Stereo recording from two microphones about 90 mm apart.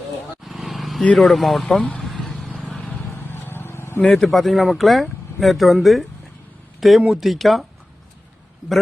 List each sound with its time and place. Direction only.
0.4 s vehicle: centre (ahead or behind)
1.0 s speech: centre (ahead or behind)
2.5 s vehicle: 10° left (ahead or behind)
2.8 s vehicle: 20° left (ahead or behind)
4.0 s speech: 5° left (ahead or behind)